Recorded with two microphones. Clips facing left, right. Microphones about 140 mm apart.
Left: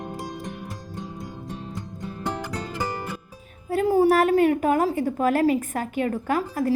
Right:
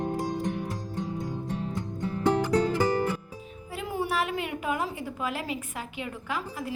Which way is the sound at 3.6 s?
40° left (ahead or behind).